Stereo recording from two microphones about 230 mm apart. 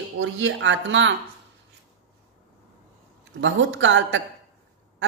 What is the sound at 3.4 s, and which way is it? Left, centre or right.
Speech, right.